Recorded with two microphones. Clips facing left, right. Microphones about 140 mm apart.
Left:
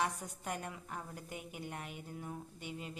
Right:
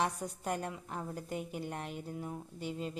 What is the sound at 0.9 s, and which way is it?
Speech, 30° right (ahead or behind).